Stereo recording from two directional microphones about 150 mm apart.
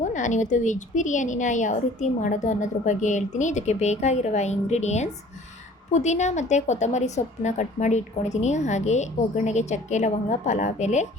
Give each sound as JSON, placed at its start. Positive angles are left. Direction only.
{"t": 0.1, "sound": "a woman's voice", "side_deg": 55}